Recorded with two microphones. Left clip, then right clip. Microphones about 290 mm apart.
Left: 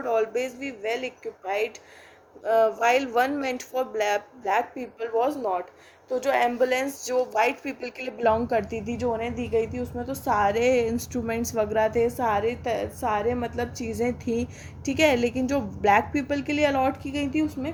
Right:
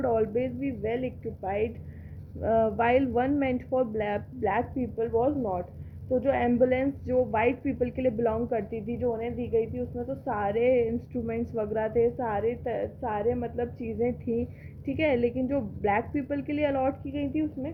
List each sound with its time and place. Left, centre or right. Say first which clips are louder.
0.1 s a woman's voice: left 2 dB; left